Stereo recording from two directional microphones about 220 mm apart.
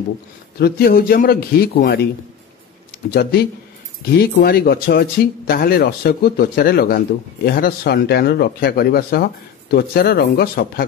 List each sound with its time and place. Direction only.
0.6 s speech: 45° left (ahead or behind)
3.1 s speech: 45° left (ahead or behind)